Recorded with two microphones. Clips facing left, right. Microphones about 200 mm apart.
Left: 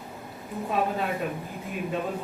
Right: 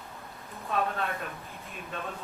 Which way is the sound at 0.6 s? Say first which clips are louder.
Left 3 dB; 10° left (ahead or behind).